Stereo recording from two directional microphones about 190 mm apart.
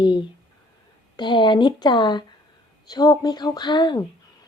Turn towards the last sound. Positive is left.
turn(degrees=25)  # may be behind; listen again after turning